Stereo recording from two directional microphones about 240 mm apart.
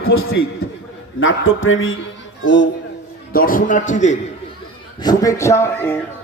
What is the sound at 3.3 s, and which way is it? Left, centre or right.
Speech, left.